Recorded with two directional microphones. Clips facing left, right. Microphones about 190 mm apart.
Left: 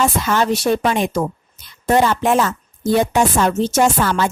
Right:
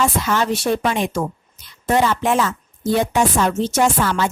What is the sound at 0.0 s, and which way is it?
A woman's voice, 40° left (ahead or behind).